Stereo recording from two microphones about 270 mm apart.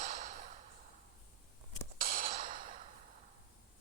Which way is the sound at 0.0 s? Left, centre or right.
Right.